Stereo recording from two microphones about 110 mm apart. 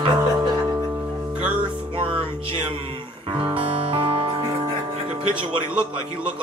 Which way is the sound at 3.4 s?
55° right (ahead or behind).